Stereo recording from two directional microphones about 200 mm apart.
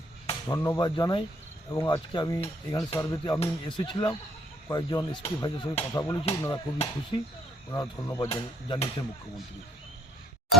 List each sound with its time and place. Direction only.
0.3 s speech: 15° left (ahead or behind)
1.9 s cutlery: 20° left (ahead or behind)
3.0 s speech: 15° left (ahead or behind)
3.4 s cutlery: 25° left (ahead or behind)
4.7 s speech: 20° left (ahead or behind)
5.2 s cutlery: 30° left (ahead or behind)
5.9 s speech: 15° left (ahead or behind)
6.5 s cutlery: 25° left (ahead or behind)
7.7 s speech: 15° left (ahead or behind)
8.3 s cutlery: 25° left (ahead or behind)